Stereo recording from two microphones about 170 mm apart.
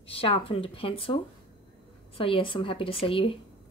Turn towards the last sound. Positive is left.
turn(degrees=30)  # may be behind; listen again after turning